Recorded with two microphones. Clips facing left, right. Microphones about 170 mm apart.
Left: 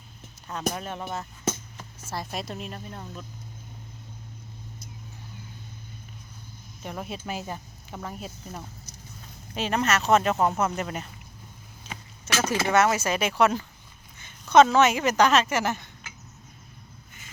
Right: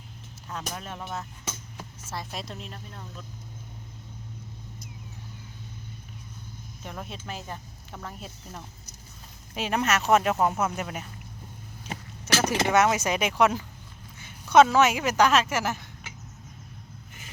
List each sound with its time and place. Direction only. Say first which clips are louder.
0.7 s speech: left 4 dB; 5° left (ahead or behind)
6.8 s speech: left 4 dB; 5° left (ahead or behind)
9.6 s speech: left 1 dB; 10° right (ahead or behind)
11.9 s a sound: right 4 dB; 15° right (ahead or behind)
12.5 s speech: left 1 dB; 15° right (ahead or behind)